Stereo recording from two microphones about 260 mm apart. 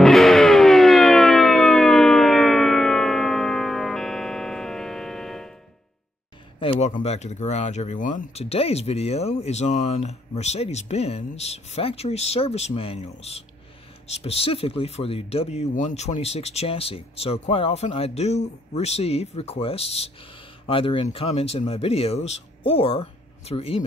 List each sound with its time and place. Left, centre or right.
0.0 s music: centre
6.6 s speech: left